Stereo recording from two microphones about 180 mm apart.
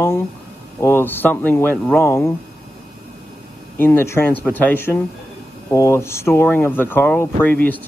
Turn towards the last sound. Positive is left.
turn(degrees=10)  # may be behind; listen again after turning